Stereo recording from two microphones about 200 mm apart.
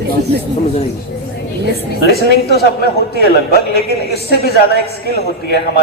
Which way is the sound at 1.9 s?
55° left (ahead or behind).